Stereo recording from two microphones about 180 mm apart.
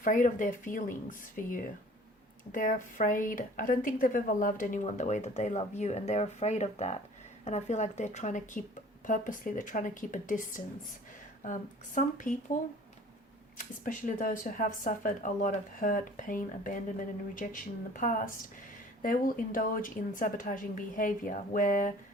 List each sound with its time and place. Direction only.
0.0 s a woman's voice: 45° left (ahead or behind)
11.9 s speech: 45° left (ahead or behind)
13.6 s speech: 50° left (ahead or behind)